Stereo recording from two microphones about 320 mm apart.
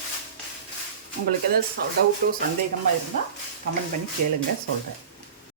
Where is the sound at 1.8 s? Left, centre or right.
Right.